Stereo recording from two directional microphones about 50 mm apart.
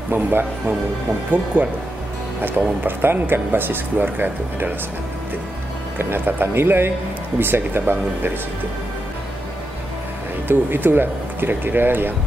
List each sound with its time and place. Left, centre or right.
0.1 s speech: right
2.8 s speech: right
5.9 s speech: right
10.5 s speech: right